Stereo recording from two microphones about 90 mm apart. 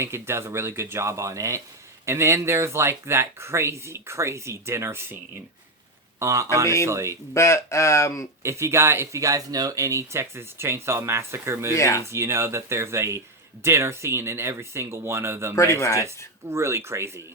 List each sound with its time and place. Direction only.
0.0 s speech: 30° right (ahead or behind)
7.3 s speech: 35° left (ahead or behind)
8.4 s speech: 30° right (ahead or behind)
11.7 s speech: 35° left (ahead or behind)
12.1 s speech: 30° right (ahead or behind)
15.5 s speech: 35° left (ahead or behind)
16.0 s speech: 30° right (ahead or behind)